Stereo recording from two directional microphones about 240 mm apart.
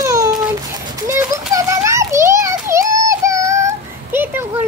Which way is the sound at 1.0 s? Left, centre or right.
Centre.